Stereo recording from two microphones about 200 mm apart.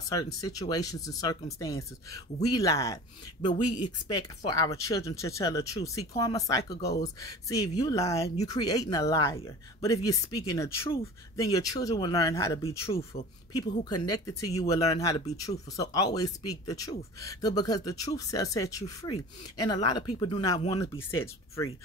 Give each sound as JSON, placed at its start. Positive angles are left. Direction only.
{"t": 0.1, "sound": "speech", "side_deg": 20}